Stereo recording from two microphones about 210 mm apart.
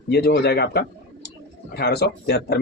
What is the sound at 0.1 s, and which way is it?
Speech, 50° left (ahead or behind).